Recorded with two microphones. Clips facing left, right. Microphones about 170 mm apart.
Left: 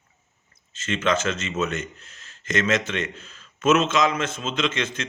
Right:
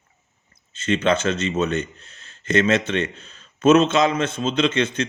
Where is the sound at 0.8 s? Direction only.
30° right (ahead or behind).